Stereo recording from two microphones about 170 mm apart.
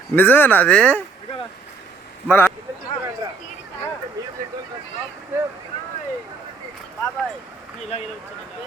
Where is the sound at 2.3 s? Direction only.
15° left (ahead or behind).